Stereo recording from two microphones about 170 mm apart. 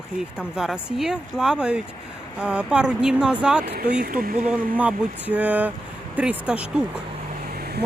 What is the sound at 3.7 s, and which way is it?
Speech, 65° right (ahead or behind).